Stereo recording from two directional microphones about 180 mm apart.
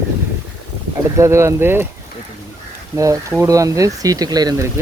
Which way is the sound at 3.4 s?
20° right (ahead or behind).